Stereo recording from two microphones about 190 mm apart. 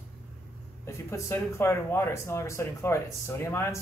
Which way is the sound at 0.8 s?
15° left (ahead or behind).